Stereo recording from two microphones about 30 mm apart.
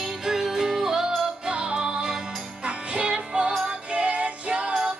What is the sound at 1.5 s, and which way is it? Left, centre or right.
Music, right.